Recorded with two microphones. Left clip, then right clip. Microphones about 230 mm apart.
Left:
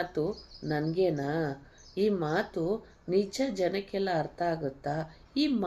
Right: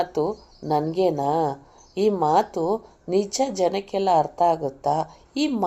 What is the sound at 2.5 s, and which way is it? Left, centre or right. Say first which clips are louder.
Speech: right 8 dB; right.